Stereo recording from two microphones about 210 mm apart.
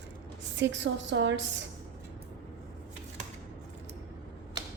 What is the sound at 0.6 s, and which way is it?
Speech, 60° right (ahead or behind).